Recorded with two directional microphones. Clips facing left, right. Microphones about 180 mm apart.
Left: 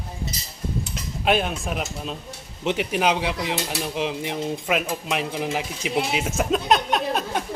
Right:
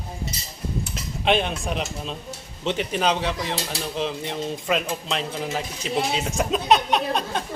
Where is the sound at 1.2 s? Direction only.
5° left (ahead or behind).